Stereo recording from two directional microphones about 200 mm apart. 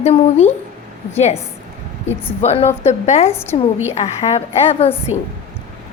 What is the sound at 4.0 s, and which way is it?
Speech, 30° left (ahead or behind).